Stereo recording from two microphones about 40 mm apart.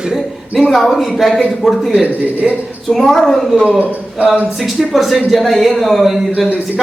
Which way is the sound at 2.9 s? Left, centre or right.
Centre.